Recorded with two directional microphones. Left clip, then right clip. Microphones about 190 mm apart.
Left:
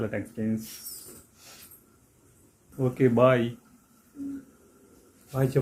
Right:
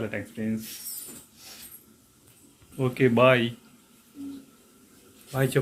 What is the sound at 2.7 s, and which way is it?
Speech, 5° left (ahead or behind).